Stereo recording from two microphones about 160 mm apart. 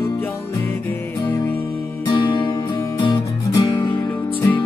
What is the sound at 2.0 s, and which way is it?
Music, 30° left (ahead or behind).